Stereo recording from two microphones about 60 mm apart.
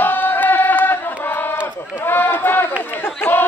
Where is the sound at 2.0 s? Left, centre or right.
Left.